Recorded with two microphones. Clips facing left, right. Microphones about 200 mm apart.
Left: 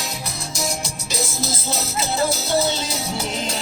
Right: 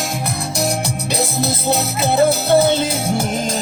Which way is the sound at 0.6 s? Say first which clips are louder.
Right 7 dB; 60° right (ahead or behind).